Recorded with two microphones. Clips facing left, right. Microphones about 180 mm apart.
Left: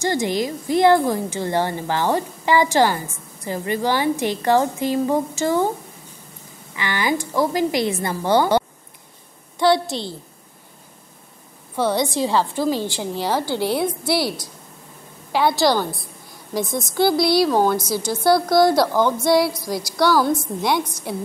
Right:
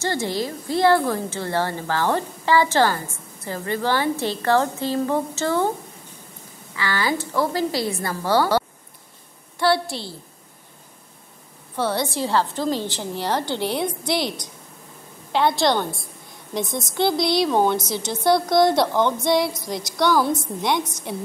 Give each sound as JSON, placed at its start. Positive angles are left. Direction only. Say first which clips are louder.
{"t": 0.0, "sound": "a woman's voice", "louder": "left 3 dB", "side_deg": 15}
{"t": 6.7, "sound": "a woman's voice", "louder": "left 1 dB", "side_deg": 20}
{"t": 11.7, "sound": "a woman's voice", "louder": "left 3 dB", "side_deg": 15}